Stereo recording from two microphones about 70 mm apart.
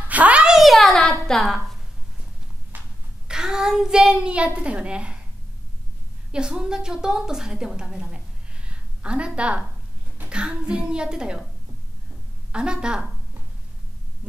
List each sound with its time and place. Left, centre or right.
0.1 s a sound: centre
0.6 s a child's voice: centre
3.3 s child singing: centre
6.3 s a woman's voice: centre
10.3 s child singing: centre
12.5 s child singing: centre